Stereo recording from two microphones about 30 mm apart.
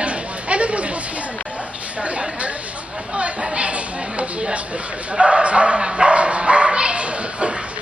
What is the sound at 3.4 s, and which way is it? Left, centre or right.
Speech, right.